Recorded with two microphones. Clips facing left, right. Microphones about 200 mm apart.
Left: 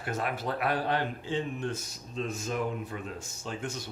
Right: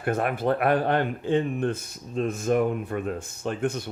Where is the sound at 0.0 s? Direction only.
55° right (ahead or behind).